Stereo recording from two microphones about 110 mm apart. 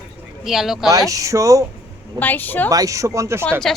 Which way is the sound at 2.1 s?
15° left (ahead or behind).